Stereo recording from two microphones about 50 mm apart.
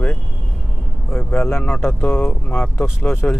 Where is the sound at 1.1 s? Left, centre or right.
Left.